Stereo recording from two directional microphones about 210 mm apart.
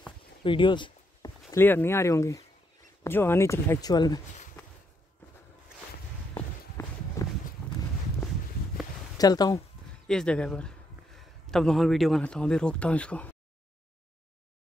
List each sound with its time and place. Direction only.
0.4 s a sound: 25° left (ahead or behind)
1.5 s speech: 10° left (ahead or behind)
6.8 s walk: 10° left (ahead or behind)
9.2 s speech: 20° left (ahead or behind)
10.0 s a man's voice: 5° left (ahead or behind)